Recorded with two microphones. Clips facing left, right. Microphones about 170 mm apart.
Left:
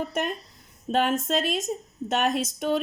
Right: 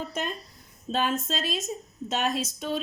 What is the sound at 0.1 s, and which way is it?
A woman's voice, 60° left (ahead or behind).